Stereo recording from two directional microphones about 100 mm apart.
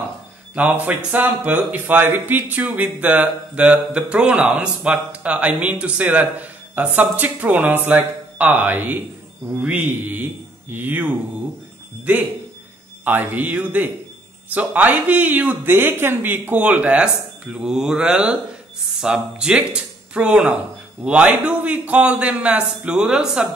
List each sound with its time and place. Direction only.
0.6 s a man's voice: 15° right (ahead or behind)
13.0 s speech: 20° right (ahead or behind)